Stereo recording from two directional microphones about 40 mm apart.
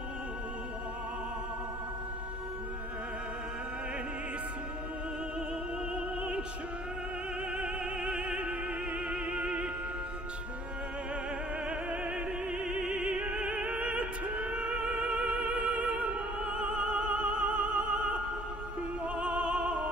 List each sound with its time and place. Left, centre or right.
5.9 s opera: right
7.5 s opera: right
9.1 s music: right
12.7 s opera: right